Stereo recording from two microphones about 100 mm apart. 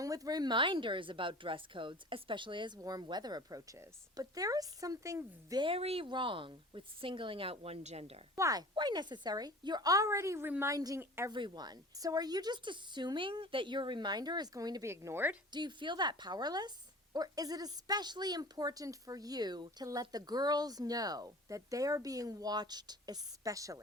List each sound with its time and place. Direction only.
0.0 s a woman's voice: 35° right (ahead or behind); by 2.7 s 55° right (ahead or behind)
2.8 s a woman's voice: 40° right (ahead or behind)
5.7 s speech: 80° right
6.1 s a woman's voice: 55° right (ahead or behind); by 8.2 s 90° right
8.4 s a woman's voice: 35° right (ahead or behind)
8.7 s a woman's voice: 45° right (ahead or behind)
11.3 s a woman's voice: 50° right (ahead or behind)
14.8 s speech: 25° right (ahead or behind)
15.5 s a woman's voice: 50° right (ahead or behind); by 23.8 s 35° right (ahead or behind)